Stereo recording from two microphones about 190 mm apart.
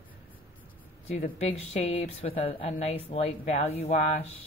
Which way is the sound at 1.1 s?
35° left (ahead or behind).